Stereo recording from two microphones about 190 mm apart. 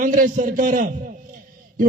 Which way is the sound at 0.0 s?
45° right (ahead or behind).